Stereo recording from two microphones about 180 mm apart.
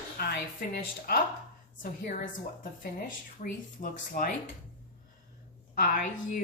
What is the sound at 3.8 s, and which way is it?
Speech, 55° left (ahead or behind).